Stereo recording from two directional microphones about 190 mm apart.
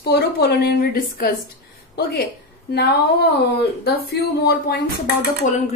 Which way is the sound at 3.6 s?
55° left (ahead or behind).